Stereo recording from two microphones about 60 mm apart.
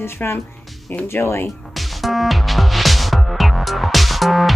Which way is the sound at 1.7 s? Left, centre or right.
Centre.